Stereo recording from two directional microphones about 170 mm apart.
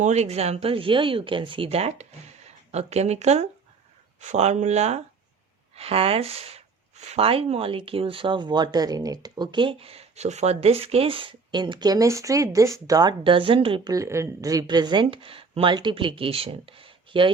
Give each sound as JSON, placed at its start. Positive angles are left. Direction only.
{"t": 0.0, "sound": "speech", "side_deg": -40}
{"t": 13.9, "sound": "a woman's voice", "side_deg": -15}